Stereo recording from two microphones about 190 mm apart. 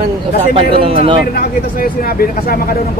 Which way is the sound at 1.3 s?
50° left (ahead or behind).